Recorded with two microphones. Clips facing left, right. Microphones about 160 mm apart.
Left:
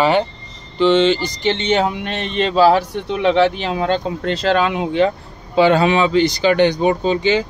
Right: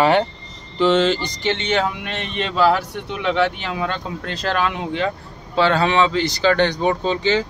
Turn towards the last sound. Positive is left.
turn(degrees=15)  # may be behind; listen again after turning